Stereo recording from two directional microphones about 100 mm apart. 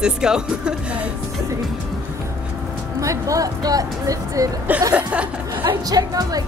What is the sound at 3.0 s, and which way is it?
Speech, 35° right (ahead or behind).